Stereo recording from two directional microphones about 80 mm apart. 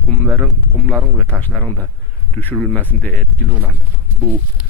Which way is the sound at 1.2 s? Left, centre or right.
Centre.